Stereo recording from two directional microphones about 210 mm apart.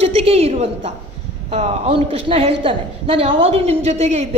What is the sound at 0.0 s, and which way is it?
A woman's voice, 30° right (ahead or behind).